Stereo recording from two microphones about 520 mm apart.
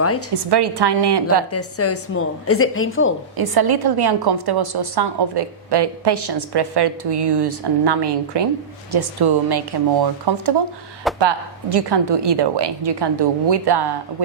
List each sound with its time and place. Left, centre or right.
0.3 s a woman's voice: right
1.5 s a woman's voice: left
3.3 s a woman's voice: right
11.1 s speech: centre
11.7 s a woman's voice: right